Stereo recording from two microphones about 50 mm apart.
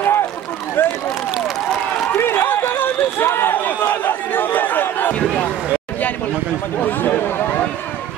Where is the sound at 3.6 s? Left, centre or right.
Left.